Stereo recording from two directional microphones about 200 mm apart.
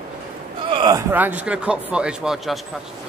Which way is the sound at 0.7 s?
20° right (ahead or behind).